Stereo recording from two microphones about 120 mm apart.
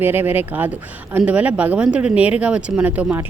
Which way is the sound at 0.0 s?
15° right (ahead or behind).